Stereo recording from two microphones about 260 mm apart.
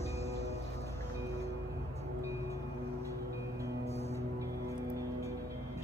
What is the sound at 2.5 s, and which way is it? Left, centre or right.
Music, centre.